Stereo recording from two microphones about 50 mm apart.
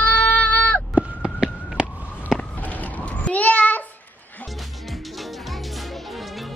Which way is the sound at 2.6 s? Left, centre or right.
Left.